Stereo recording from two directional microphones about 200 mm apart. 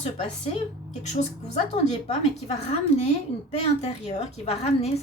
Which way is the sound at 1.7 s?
30° left (ahead or behind).